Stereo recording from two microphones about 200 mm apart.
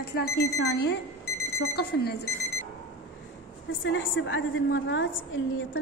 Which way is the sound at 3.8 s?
75° left (ahead or behind).